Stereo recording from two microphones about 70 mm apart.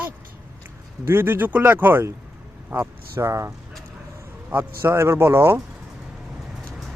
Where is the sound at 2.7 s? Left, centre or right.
Right.